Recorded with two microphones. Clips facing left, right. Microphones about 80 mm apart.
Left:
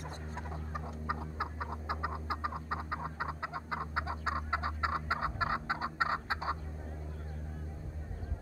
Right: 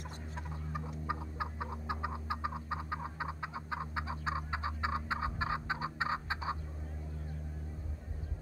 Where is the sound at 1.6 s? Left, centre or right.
Centre.